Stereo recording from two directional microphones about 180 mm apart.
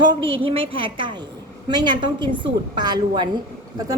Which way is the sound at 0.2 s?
30° right (ahead or behind).